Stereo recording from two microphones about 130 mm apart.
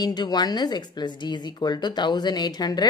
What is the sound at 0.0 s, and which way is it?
A woman's voice, 30° left (ahead or behind).